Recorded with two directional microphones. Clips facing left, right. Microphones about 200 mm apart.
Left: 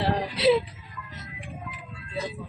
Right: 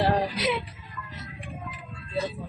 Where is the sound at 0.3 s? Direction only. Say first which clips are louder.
Left 7 dB; 30° left (ahead or behind).